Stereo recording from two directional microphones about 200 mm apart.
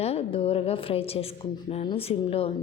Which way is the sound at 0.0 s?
30° left (ahead or behind).